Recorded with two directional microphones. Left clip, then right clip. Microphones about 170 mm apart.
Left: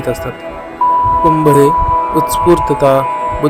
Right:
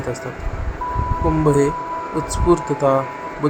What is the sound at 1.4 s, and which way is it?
Speech, 20° left (ahead or behind).